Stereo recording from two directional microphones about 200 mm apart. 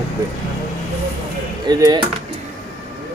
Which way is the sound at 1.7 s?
20° right (ahead or behind).